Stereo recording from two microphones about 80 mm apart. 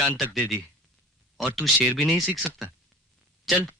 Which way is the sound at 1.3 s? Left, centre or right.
Centre.